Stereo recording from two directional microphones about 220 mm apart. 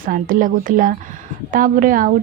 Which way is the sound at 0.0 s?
40° right (ahead or behind).